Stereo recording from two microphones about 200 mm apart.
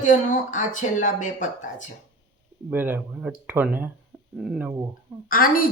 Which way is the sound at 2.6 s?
10° right (ahead or behind).